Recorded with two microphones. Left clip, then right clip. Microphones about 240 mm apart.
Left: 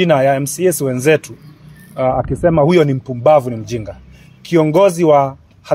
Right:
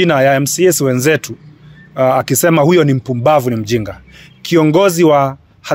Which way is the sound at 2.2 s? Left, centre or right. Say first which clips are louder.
Right 2 dB; right.